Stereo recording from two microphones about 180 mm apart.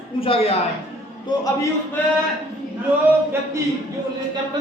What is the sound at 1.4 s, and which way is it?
Speech, 15° left (ahead or behind).